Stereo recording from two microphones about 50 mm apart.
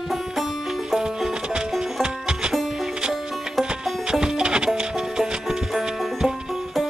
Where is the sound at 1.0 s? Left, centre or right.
Centre.